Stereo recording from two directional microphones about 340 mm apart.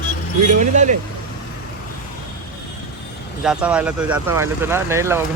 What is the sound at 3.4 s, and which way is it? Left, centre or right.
Speech, centre.